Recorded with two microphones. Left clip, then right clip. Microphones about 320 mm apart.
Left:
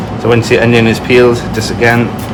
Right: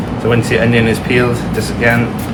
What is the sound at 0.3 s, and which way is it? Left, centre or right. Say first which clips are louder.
Speech: left 5 dB; left.